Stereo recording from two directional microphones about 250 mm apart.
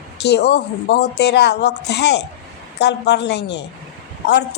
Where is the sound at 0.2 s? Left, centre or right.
Left.